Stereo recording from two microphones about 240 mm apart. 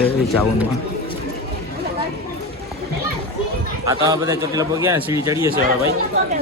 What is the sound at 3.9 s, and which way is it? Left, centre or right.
A man's voice, centre.